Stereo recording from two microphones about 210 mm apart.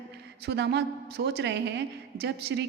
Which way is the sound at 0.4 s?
55° right (ahead or behind).